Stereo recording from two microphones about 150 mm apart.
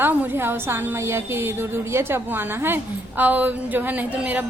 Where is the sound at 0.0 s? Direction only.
10° right (ahead or behind).